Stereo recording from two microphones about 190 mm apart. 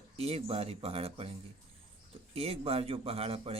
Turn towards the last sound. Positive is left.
turn(degrees=-30)  # may be behind; listen again after turning